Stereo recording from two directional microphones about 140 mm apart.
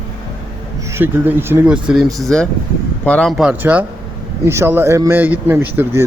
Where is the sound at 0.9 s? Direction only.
15° right (ahead or behind).